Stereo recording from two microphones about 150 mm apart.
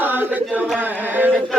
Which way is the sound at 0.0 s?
15° right (ahead or behind).